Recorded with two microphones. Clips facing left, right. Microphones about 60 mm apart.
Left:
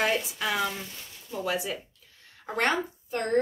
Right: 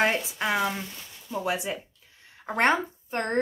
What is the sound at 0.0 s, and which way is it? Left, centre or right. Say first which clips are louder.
A woman's voice: right 2 dB; right.